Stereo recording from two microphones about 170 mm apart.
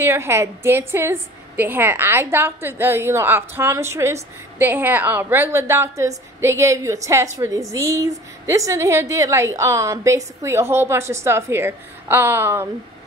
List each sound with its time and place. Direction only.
0.0 s a woman's voice: 15° right (ahead or behind)